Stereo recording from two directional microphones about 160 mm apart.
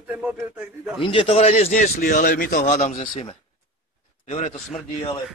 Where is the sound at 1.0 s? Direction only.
35° left (ahead or behind).